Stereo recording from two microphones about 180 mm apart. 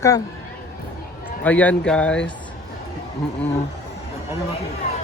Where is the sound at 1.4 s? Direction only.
10° left (ahead or behind).